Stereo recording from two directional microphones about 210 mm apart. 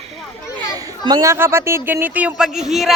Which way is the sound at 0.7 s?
20° right (ahead or behind).